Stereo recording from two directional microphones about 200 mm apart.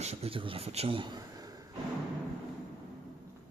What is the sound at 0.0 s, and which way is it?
A man's voice, 30° right (ahead or behind).